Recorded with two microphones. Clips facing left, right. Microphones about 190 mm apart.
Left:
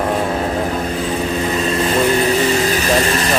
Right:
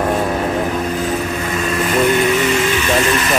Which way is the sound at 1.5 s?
30° left (ahead or behind).